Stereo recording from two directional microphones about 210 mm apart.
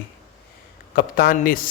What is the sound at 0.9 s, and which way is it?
Speech, 45° left (ahead or behind).